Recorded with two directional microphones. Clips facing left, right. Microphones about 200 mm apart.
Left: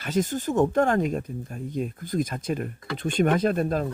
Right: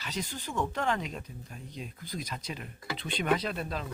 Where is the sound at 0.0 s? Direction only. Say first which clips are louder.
Left 12 dB; 50° left (ahead or behind).